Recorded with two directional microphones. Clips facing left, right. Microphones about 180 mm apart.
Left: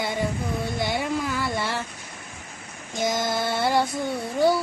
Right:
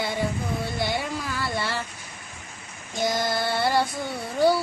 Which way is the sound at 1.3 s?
15° left (ahead or behind).